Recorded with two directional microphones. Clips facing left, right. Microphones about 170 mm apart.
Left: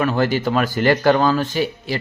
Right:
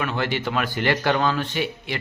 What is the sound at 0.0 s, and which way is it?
Speech, 40° left (ahead or behind).